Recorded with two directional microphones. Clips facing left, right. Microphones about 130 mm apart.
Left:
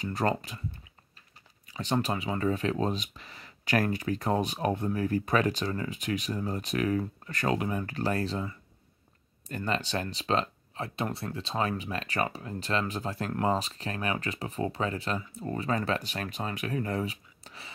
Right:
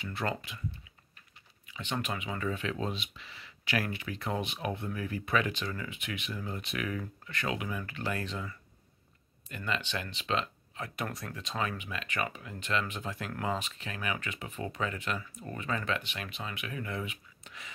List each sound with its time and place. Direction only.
0.0 s speech: 40° left (ahead or behind)